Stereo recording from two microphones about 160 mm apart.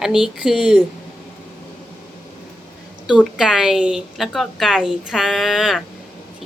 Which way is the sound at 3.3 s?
5° right (ahead or behind).